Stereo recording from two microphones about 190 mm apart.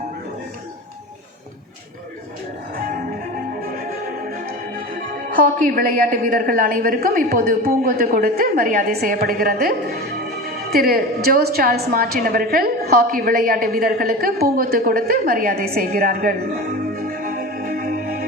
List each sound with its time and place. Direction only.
2.7 s music: 45° right (ahead or behind)
5.3 s a woman's voice: 45° right (ahead or behind)